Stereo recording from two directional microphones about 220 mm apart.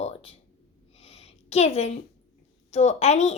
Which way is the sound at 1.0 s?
30° left (ahead or behind).